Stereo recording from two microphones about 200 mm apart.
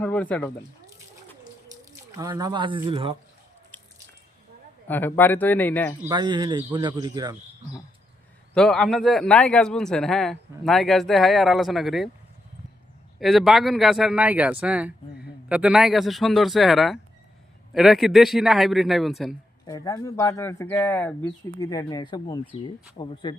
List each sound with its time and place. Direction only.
0.0 s speech: 5° left (ahead or behind)
2.1 s speech: 20° right (ahead or behind)
3.7 s drip: 10° left (ahead or behind)
4.9 s speech: 10° left (ahead or behind)
6.1 s speech: 20° right (ahead or behind)
8.5 s a man's voice: centre (ahead or behind)
13.1 s a man's voice: centre (ahead or behind)
19.6 s speech: 15° left (ahead or behind)